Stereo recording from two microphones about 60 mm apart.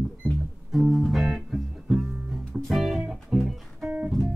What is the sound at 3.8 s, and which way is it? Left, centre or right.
Music, right.